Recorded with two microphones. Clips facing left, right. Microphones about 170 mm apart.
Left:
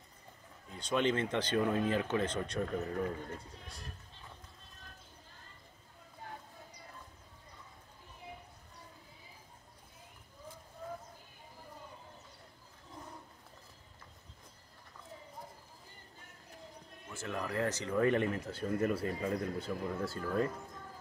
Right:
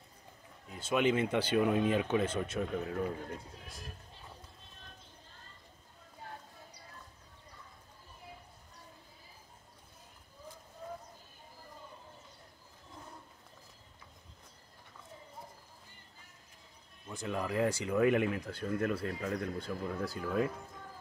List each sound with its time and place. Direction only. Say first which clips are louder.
0.7 s speech: right 2 dB; 10° right (ahead or behind)
17.1 s speech: right 3 dB; 15° right (ahead or behind)